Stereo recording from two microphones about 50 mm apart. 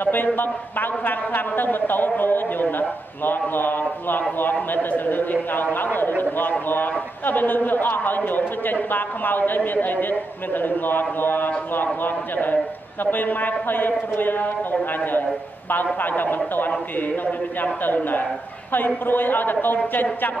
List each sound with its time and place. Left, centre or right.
0.0 s a man's voice: left
15.7 s a man's voice: left